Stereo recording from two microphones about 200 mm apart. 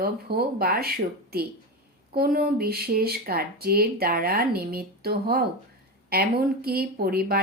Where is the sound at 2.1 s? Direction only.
50° right (ahead or behind).